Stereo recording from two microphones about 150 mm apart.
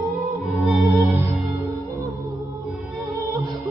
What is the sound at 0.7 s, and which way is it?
Music, 20° right (ahead or behind).